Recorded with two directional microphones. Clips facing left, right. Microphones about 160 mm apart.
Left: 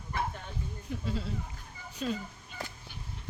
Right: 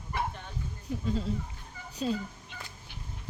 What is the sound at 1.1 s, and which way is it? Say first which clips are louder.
Speech: right 5 dB; 40° right (ahead or behind).